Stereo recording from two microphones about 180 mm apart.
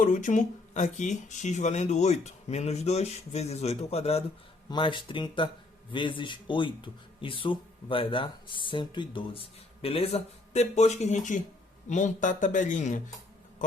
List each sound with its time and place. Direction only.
0.0 s speech: 45° left (ahead or behind)